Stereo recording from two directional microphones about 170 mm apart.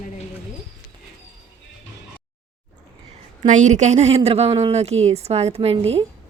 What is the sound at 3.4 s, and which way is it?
Speech, 45° right (ahead or behind).